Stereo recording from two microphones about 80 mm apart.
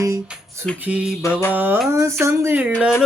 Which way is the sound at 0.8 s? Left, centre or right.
Centre.